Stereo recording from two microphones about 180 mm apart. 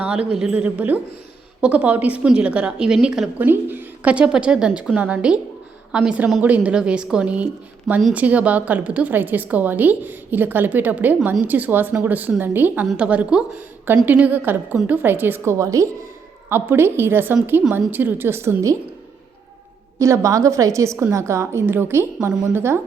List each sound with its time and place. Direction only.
0.0 s a woman's voice: 5° right (ahead or behind)
20.0 s a woman's voice: 15° right (ahead or behind)